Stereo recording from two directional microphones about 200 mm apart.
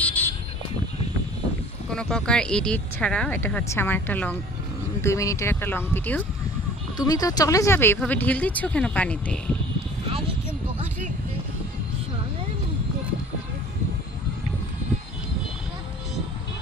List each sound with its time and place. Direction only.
0.0 s vehicle: 10° left (ahead or behind)
1.9 s speech: 5° left (ahead or behind)
10.0 s a sound: 25° right (ahead or behind)